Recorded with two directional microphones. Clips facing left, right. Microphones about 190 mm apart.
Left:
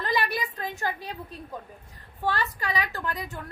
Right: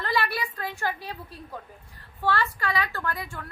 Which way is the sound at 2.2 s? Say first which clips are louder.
Right 2 dB; 20° left (ahead or behind).